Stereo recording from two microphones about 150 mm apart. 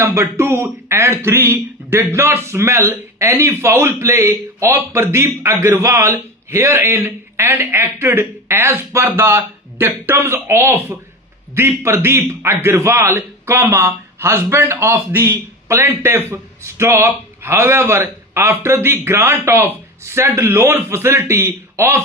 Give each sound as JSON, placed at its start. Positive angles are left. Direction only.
{"t": 0.0, "sound": "speech", "side_deg": -15}